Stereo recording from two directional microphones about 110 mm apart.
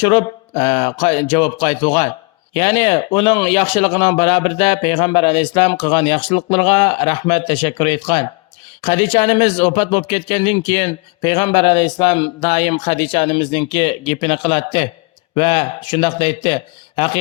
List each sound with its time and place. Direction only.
0.0 s speech: 50° left (ahead or behind)
12.4 s speech: 85° left; by 17.2 s 55° left (ahead or behind)